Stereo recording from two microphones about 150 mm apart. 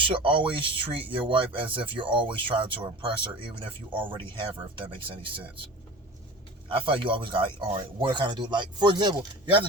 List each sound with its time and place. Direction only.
0.0 s speech: 35° right (ahead or behind)
6.7 s speech: 35° right (ahead or behind)